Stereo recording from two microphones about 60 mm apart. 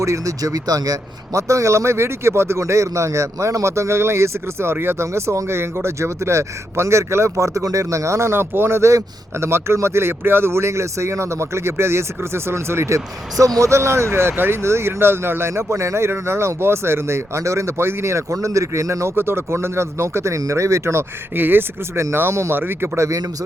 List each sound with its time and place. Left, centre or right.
0.0 s speech: right
13.4 s speech: right
19.1 s speech: right
21.3 s speech: right
23.0 s speech: right